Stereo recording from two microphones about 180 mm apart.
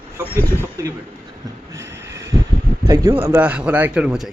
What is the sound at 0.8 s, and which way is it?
Speech, 15° right (ahead or behind).